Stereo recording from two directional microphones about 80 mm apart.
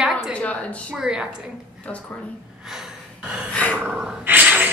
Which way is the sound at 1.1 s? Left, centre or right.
Centre.